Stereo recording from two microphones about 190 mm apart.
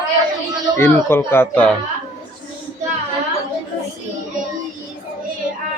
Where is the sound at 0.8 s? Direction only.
10° left (ahead or behind).